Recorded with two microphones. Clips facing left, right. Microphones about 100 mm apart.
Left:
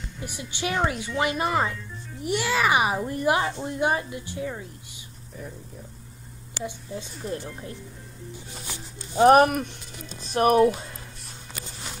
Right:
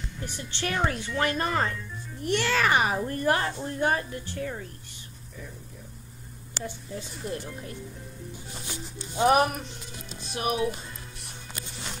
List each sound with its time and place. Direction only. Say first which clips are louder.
0.2 s speech: left 2 dB; 10° left (ahead or behind)
6.6 s speech: left 3 dB; 25° left (ahead or behind)
9.2 s speech: left 6 dB; 50° left (ahead or behind)